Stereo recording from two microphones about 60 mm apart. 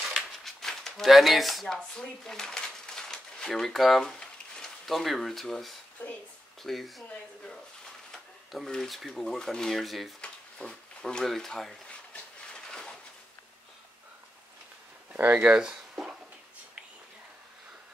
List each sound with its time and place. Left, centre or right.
0.1 s a sound: centre
1.8 s speech: centre
8.6 s speech: centre
10.2 s speech: centre
12.1 s train: centre
15.3 s speech: centre